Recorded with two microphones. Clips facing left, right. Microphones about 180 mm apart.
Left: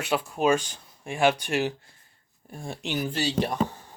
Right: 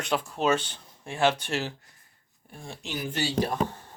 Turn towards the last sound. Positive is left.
turn(degrees=25)  # may be behind; listen again after turning